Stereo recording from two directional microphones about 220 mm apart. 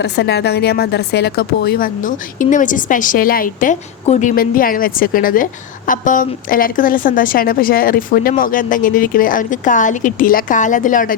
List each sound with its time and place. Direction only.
0.0 s a woman's voice: 50° left (ahead or behind)